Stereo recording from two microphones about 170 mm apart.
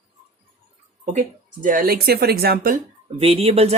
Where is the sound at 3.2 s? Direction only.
35° right (ahead or behind).